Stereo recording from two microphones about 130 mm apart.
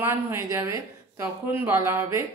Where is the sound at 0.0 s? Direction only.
15° right (ahead or behind).